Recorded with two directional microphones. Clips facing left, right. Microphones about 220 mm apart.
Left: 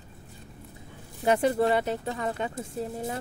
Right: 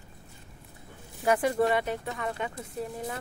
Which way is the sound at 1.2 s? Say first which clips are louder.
Left 2 dB; 30° left (ahead or behind).